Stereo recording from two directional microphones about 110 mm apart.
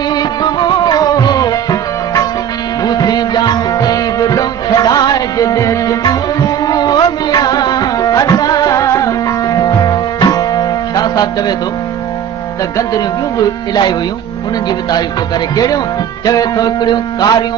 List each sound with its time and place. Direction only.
0.1 s music: 40° left (ahead or behind)
12.7 s speech: 35° left (ahead or behind)
15.5 s speech: 35° left (ahead or behind)